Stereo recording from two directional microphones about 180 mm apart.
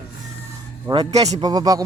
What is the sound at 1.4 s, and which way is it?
Speech, 20° right (ahead or behind).